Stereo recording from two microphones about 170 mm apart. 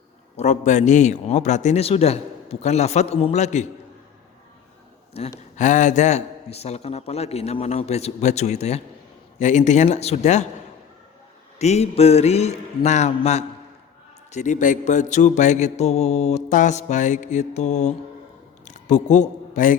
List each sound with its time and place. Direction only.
0.3 s a man's voice: 45° left (ahead or behind)
5.1 s a man's voice: 40° left (ahead or behind)
9.4 s mantra: 45° left (ahead or behind)
11.6 s a man's voice: 40° left (ahead or behind)
14.3 s mantra: 45° left (ahead or behind)
18.6 s a sound: 45° left (ahead or behind)